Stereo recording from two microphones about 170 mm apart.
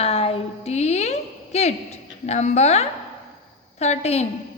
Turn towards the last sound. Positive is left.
turn(degrees=40)  # may be behind; listen again after turning